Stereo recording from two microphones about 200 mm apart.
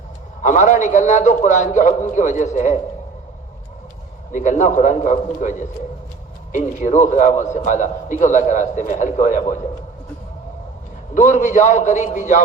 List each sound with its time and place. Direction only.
0.4 s a man's voice: 40° left (ahead or behind)
4.3 s a man's voice: 40° left (ahead or behind)
11.1 s a man's voice: 40° left (ahead or behind)